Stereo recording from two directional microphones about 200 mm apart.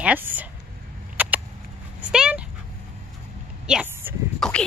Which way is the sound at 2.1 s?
5° right (ahead or behind).